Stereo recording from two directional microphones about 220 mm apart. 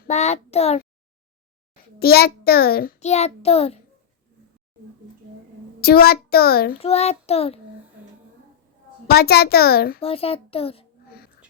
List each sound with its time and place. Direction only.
0.1 s a child's voice: 30° left (ahead or behind)
2.0 s a child's voice: 45° left (ahead or behind)
3.0 s a child's voice: 30° left (ahead or behind)
5.8 s a child's voice: 45° left (ahead or behind)
6.7 s a child's voice: 30° left (ahead or behind)
9.0 s a child's voice: 45° left (ahead or behind)
10.0 s a child's voice: 25° left (ahead or behind)